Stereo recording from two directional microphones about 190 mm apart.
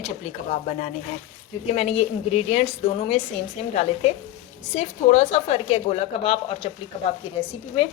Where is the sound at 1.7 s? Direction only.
35° left (ahead or behind).